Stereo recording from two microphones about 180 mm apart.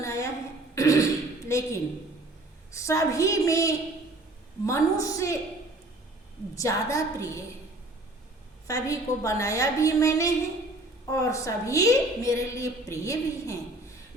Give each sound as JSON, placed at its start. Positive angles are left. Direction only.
{"t": 0.0, "sound": "a sound", "side_deg": 15}
{"t": 0.8, "sound": "beatboxing", "side_deg": 20}
{"t": 1.5, "sound": "a woman's voice", "side_deg": 15}
{"t": 6.6, "sound": "a woman's voice", "side_deg": 15}
{"t": 8.6, "sound": "a woman's voice", "side_deg": 15}